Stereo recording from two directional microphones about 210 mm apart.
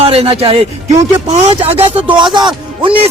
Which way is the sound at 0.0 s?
30° right (ahead or behind).